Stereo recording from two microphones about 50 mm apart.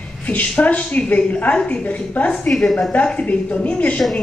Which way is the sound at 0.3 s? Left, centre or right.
Left.